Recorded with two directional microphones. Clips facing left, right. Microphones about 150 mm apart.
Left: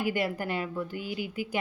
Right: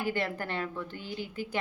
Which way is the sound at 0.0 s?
10° left (ahead or behind).